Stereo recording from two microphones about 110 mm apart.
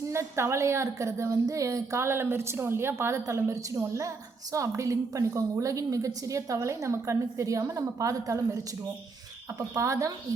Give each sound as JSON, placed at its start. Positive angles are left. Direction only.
{"t": 0.1, "sound": "a woman's voice", "side_deg": -25}